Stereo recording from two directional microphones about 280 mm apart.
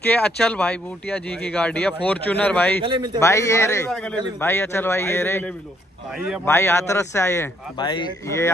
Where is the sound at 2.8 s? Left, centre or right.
Centre.